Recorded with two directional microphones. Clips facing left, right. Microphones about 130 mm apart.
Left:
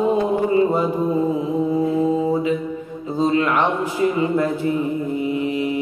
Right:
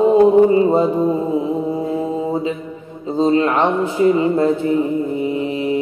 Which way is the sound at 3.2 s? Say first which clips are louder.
Right 3 dB; 30° right (ahead or behind).